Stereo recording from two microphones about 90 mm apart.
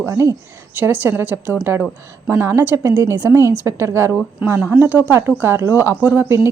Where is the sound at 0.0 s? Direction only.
30° right (ahead or behind).